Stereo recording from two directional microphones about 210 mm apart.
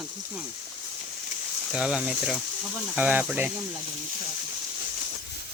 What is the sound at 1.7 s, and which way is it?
Speech, 5° right (ahead or behind).